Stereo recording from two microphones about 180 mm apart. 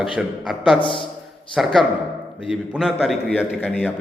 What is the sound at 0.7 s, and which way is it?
Speech, 30° left (ahead or behind).